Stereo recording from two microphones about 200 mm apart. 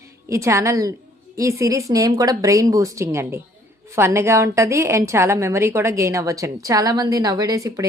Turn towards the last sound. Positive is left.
turn(degrees=-15)  # may be behind; listen again after turning